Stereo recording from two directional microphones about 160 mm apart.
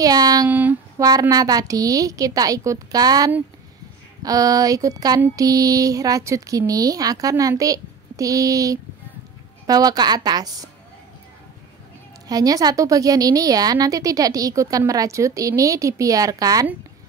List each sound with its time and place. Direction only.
0.0 s a woman's voice: 25° right (ahead or behind)
0.5 s a sound: 10° right (ahead or behind)
1.3 s a woman's voice: 25° right (ahead or behind)
12.3 s a woman's voice: 25° right (ahead or behind)